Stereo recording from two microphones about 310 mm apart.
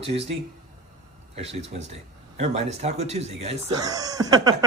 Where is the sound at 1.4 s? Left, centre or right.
Right.